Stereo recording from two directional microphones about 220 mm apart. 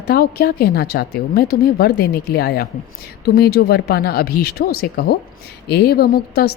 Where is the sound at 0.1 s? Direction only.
45° left (ahead or behind).